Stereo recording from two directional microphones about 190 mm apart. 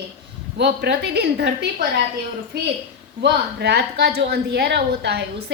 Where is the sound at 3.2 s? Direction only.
60° right (ahead or behind).